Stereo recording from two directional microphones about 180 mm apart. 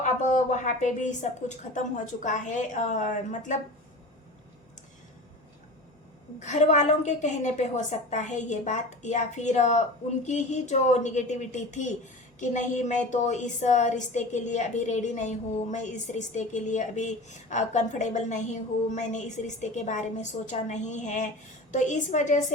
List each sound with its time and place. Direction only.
0.0 s a woman's voice: 40° left (ahead or behind)
6.4 s a woman's voice: 40° left (ahead or behind)